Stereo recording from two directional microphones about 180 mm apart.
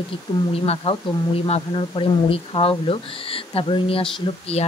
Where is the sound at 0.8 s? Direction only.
30° left (ahead or behind).